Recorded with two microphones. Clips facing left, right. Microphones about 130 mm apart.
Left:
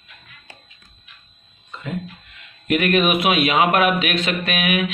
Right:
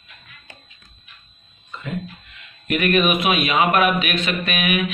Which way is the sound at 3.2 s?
90° left.